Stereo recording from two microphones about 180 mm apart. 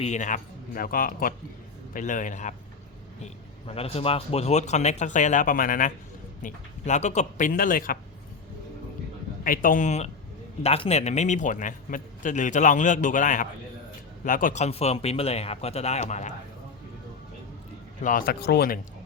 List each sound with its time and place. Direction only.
0.0 s a man's voice: 40° left (ahead or behind)
3.7 s a man's voice: 35° left (ahead or behind); by 7.9 s 50° left (ahead or behind)
9.4 s a man's voice: 50° left (ahead or behind)
18.0 s a man's voice: 50° left (ahead or behind)